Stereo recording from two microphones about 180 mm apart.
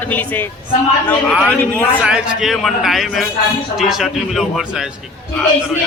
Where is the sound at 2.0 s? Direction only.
5° right (ahead or behind).